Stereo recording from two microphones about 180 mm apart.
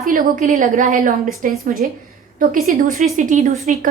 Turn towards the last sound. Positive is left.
turn(degrees=-40)  # may be behind; listen again after turning